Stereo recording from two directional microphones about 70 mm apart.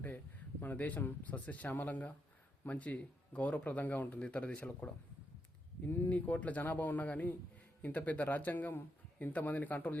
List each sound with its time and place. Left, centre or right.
0.6 s speech: left